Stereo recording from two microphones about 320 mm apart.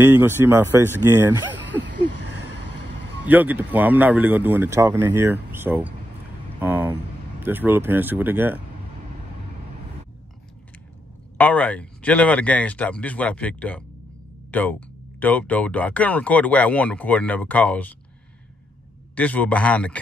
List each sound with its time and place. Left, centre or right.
0.0 s speech: centre
1.8 s a sound: right
3.3 s speech: centre
11.3 s speech: centre
19.1 s speech: centre